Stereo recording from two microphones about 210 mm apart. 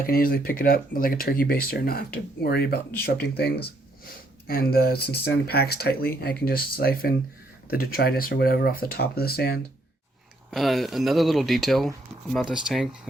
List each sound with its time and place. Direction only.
0.0 s speech: 45° left (ahead or behind)
10.5 s speech: centre (ahead or behind)